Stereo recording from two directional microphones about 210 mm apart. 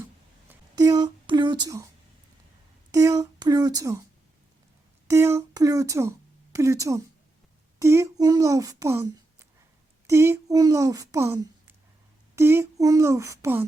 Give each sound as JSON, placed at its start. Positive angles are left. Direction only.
{"t": 0.4, "sound": "speech", "side_deg": -15}
{"t": 2.9, "sound": "child singing", "side_deg": -15}
{"t": 5.0, "sound": "speech", "side_deg": -10}
{"t": 12.4, "sound": "child singing", "side_deg": -10}